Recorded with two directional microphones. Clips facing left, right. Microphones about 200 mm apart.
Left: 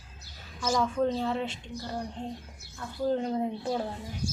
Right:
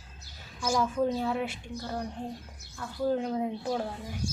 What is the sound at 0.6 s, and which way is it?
Speech, 10° right (ahead or behind).